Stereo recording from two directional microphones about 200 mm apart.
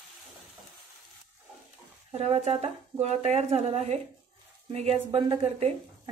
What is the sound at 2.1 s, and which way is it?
A woman's voice, 35° right (ahead or behind).